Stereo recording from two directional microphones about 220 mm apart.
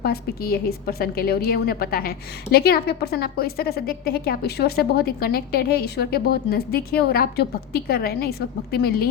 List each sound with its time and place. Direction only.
0.0 s a woman's voice: 45° left (ahead or behind)